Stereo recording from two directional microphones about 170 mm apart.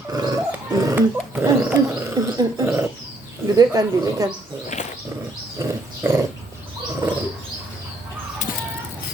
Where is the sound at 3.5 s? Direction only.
20° right (ahead or behind).